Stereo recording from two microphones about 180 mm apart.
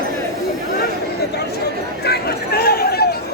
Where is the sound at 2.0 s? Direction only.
60° left (ahead or behind).